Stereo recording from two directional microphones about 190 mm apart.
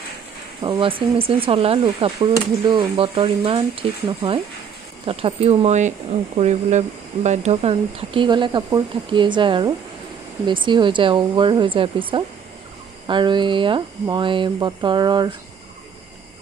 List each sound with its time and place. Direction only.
0.6 s speech: 25° right (ahead or behind)